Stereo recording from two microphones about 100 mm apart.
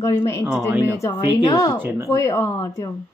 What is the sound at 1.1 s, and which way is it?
Speech, 45° left (ahead or behind).